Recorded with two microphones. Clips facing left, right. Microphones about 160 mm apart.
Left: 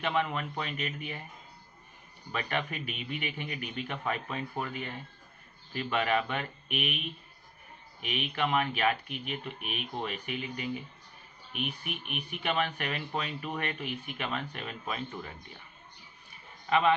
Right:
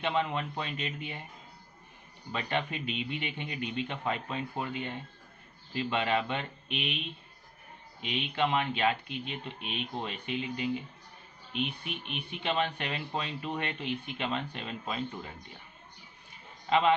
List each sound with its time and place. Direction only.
0.0 s speech: 25° right (ahead or behind)
2.3 s speech: 25° right (ahead or behind)
8.0 s speech: 25° right (ahead or behind)
16.6 s a man's voice: 20° right (ahead or behind)